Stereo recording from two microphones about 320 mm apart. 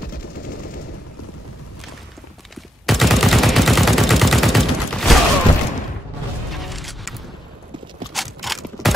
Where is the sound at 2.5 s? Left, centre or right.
Centre.